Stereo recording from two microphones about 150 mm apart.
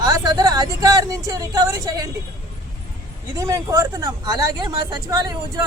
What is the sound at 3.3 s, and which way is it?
Speech, 20° right (ahead or behind).